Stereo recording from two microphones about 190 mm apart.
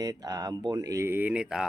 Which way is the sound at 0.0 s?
20° right (ahead or behind).